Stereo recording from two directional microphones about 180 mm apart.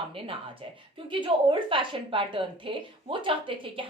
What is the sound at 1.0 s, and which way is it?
A woman's voice, 25° right (ahead or behind).